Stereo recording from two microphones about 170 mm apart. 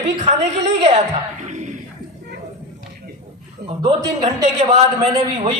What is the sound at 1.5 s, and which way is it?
Music, 45° right (ahead or behind).